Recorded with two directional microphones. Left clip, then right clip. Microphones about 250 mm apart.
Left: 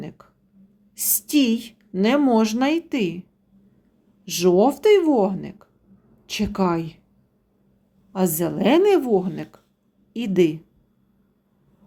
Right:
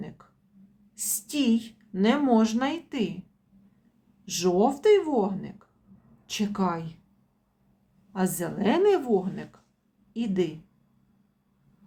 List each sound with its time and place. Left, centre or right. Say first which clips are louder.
0.9 s a woman's voice: left 9 dB; left
4.3 s a woman's voice: left 6 dB; centre
8.1 s a woman's voice: left 7 dB; left